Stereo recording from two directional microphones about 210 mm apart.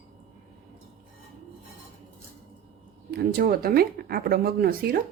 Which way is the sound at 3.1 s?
50° right (ahead or behind).